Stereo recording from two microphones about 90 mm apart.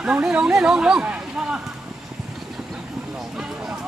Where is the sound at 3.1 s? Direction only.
5° right (ahead or behind).